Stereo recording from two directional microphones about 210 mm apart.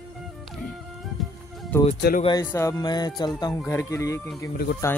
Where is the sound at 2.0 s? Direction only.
45° left (ahead or behind).